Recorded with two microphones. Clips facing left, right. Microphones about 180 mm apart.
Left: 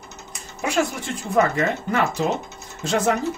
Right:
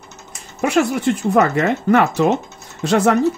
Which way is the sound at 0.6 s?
65° right (ahead or behind).